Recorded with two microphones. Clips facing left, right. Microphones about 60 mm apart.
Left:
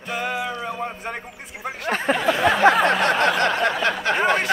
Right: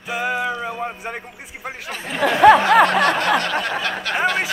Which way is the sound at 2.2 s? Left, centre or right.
Right.